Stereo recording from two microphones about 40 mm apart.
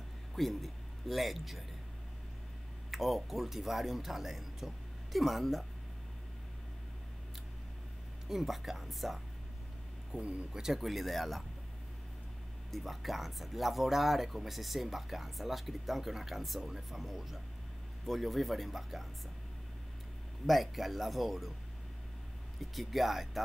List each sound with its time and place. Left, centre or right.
0.4 s speech: centre
2.9 s speech: centre
8.3 s speech: centre
10.1 s speech: right
10.8 s speech: centre
12.7 s speech: centre
20.4 s speech: centre
22.6 s speech: centre